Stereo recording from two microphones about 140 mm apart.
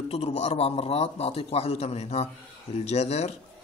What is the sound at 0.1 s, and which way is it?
Speech, 45° left (ahead or behind).